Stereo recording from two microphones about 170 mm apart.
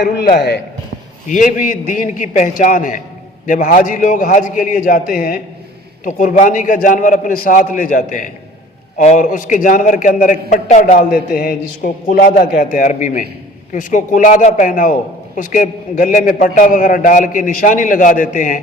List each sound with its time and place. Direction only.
0.0 s a man's voice: 75° left (ahead or behind)
1.3 s a man's voice: 50° left (ahead or behind)